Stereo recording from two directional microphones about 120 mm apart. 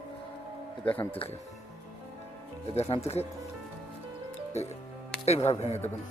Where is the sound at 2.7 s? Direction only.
55° left (ahead or behind).